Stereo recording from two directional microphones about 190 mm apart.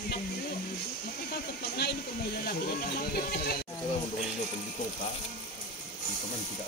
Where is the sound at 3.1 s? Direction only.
55° left (ahead or behind).